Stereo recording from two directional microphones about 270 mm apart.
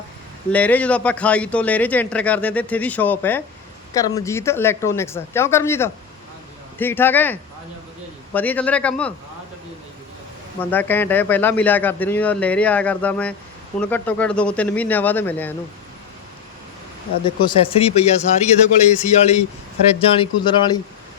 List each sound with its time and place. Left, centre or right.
0.5 s a man's voice: centre
10.6 s a man's voice: centre
17.4 s speech: centre